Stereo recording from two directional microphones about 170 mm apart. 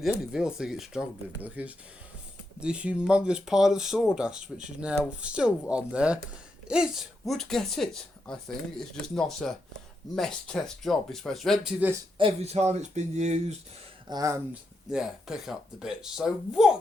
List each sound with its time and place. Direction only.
0.0 s speech: 5° right (ahead or behind)
12.1 s speech: 35° right (ahead or behind)
14.1 s speech: 20° right (ahead or behind)
14.8 s speech: 5° right (ahead or behind)